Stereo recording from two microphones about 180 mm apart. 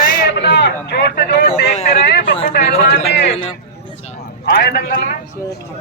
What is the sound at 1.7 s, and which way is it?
Speech, 40° left (ahead or behind).